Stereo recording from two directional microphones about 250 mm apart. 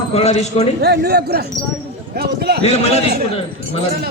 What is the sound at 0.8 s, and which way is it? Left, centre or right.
A man's voice, right.